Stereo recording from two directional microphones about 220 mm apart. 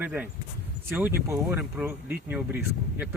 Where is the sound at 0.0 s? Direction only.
5° right (ahead or behind).